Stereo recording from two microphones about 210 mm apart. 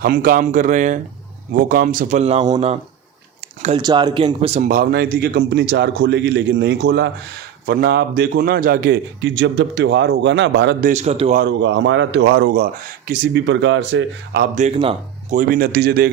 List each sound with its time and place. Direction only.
0.0 s speech: 40° right (ahead or behind)
3.8 s a man's voice: 20° right (ahead or behind); by 10.8 s 55° right (ahead or behind)
10.8 s speech: 30° right (ahead or behind)
11.3 s speech: 60° right (ahead or behind)
14.5 s speech: 30° right (ahead or behind); by 16.0 s 50° right (ahead or behind)